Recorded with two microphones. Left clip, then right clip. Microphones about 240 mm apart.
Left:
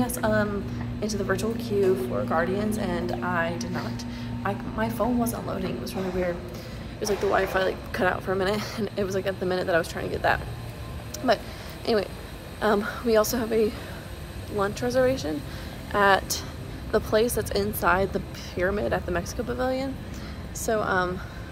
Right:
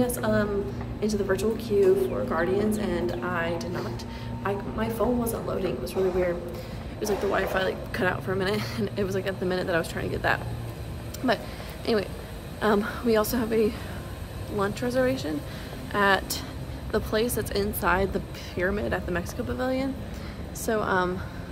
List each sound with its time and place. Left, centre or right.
0.0 s a woman's voice: centre
11.8 s a sound: centre
12.5 s a woman's voice: centre